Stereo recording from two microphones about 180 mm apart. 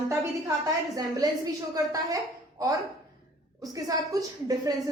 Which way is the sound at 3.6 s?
20° right (ahead or behind).